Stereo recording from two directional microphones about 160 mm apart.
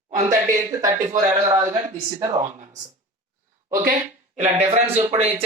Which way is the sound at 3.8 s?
50° right (ahead or behind).